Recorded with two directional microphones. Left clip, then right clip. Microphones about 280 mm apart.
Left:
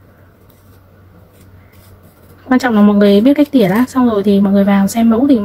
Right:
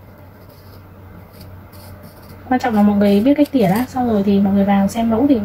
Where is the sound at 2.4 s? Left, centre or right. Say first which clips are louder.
Left 4 dB; left.